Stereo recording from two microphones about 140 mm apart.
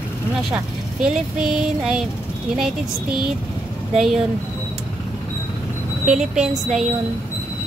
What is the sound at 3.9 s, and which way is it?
Female singing, 5° right (ahead or behind).